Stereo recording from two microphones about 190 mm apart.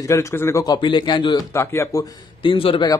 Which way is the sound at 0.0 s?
15° left (ahead or behind).